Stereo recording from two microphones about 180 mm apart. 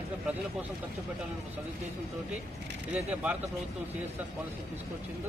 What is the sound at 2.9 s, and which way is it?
Speech, 10° right (ahead or behind).